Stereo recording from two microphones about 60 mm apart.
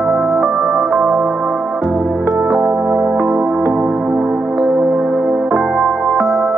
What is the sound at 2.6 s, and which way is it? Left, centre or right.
Music, centre.